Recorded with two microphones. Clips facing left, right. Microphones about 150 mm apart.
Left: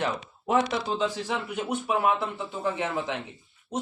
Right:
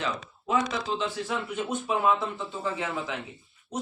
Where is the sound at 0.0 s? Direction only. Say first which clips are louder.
Left 3 dB; 60° left (ahead or behind).